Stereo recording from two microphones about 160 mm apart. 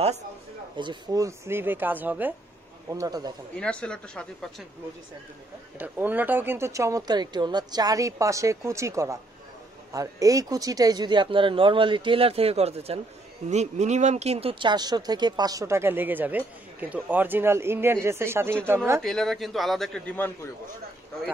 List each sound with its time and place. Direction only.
0.7 s speech: 25° right (ahead or behind)
2.9 s speech: 20° right (ahead or behind)
3.5 s a man's voice: 5° left (ahead or behind)
5.8 s speech: 10° right (ahead or behind)
19.0 s a man's voice: centre (ahead or behind)